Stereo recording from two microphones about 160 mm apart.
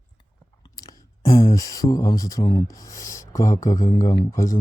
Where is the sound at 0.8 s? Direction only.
20° left (ahead or behind).